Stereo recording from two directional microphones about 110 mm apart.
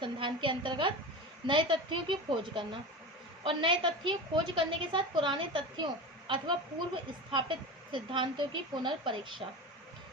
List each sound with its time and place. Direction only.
0.0 s a woman's voice: 50° right (ahead or behind)